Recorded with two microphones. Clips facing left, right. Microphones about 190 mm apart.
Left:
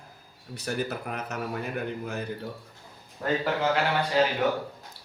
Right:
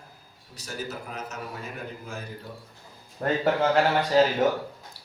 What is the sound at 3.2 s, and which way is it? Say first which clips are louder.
Speech: right 1 dB; 50° right (ahead or behind).